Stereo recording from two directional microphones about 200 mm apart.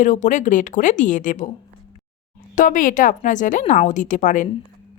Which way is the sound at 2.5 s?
40° left (ahead or behind).